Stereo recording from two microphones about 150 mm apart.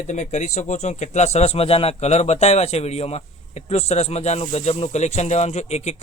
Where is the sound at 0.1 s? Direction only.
50° left (ahead or behind).